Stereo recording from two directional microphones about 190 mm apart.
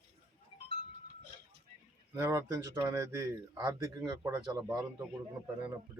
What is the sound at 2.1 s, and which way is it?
Speech, 15° right (ahead or behind).